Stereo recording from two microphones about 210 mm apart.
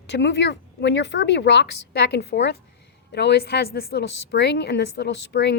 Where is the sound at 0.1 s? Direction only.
55° left (ahead or behind).